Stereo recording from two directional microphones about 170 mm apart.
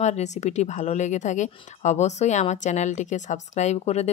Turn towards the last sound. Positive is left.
turn(degrees=40)  # may be behind; listen again after turning